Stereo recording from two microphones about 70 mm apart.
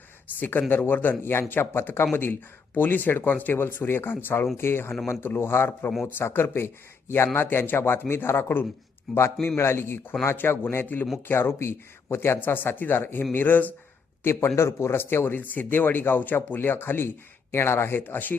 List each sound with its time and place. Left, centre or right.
0.3 s speech: left
14.3 s speech: left